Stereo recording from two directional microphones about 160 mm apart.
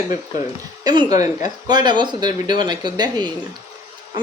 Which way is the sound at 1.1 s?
50° left (ahead or behind).